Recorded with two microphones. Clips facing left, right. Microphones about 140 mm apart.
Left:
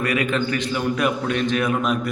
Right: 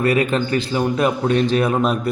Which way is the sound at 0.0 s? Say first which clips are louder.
Right 4 dB; 35° right (ahead or behind).